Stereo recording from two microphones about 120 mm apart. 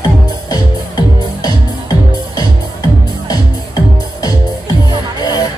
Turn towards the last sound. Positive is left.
turn(degrees=35)  # may be behind; listen again after turning